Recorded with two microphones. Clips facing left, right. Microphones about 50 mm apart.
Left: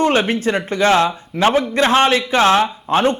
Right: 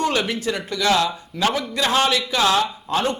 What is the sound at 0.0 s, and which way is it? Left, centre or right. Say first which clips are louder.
A man's voice: left 6 dB; left.